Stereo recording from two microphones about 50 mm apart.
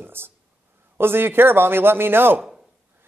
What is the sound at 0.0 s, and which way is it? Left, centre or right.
A man's voice, right.